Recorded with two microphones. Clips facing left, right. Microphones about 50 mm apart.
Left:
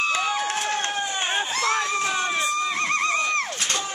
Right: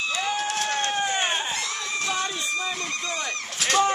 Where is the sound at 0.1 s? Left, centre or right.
Left.